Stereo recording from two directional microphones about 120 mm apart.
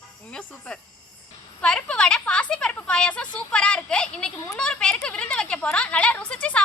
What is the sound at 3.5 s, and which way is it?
Speech, 10° left (ahead or behind).